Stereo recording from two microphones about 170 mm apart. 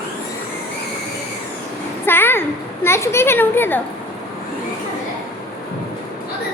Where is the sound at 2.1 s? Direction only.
10° left (ahead or behind).